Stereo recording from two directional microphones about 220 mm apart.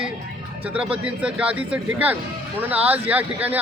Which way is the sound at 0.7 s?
5° right (ahead or behind).